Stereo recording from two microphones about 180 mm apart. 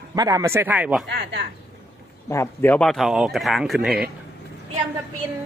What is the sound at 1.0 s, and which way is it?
Speech, 70° right (ahead or behind).